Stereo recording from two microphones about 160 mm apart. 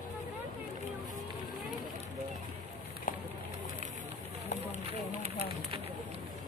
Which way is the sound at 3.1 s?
55° left (ahead or behind).